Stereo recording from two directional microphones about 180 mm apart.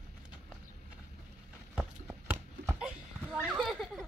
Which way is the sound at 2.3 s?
10° right (ahead or behind).